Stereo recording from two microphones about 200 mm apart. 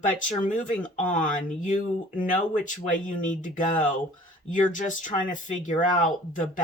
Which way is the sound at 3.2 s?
40° left (ahead or behind).